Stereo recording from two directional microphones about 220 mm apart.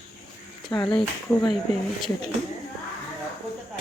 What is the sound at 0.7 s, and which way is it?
Speech, 20° left (ahead or behind).